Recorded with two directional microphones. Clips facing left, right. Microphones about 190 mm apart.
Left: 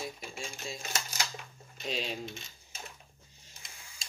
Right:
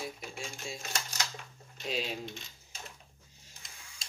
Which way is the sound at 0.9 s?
5° left (ahead or behind).